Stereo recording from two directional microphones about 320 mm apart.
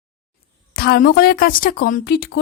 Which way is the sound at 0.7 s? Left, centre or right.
Left.